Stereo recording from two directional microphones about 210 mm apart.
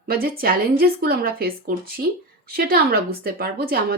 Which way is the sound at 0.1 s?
45° right (ahead or behind).